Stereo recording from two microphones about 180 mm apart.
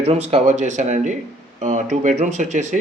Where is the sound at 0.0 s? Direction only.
35° right (ahead or behind).